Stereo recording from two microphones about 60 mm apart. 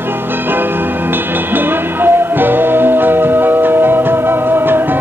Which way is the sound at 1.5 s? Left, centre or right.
Right.